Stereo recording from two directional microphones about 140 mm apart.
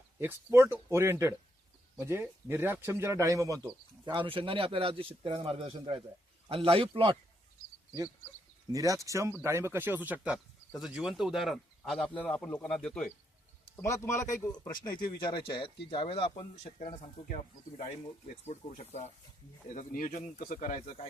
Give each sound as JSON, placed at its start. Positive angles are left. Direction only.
{"t": 0.2, "sound": "speech", "side_deg": -15}
{"t": 4.0, "sound": "speech", "side_deg": -35}
{"t": 8.7, "sound": "speech", "side_deg": -25}
{"t": 13.7, "sound": "a man's voice", "side_deg": 20}
{"t": 14.9, "sound": "speech", "side_deg": 90}
{"t": 15.6, "sound": "speech", "side_deg": 40}
{"t": 17.2, "sound": "speech", "side_deg": 65}
{"t": 19.7, "sound": "speech", "side_deg": 70}